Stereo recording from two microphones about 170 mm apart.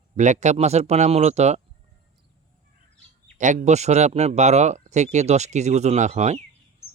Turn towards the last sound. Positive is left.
turn(degrees=-40)  # may be behind; listen again after turning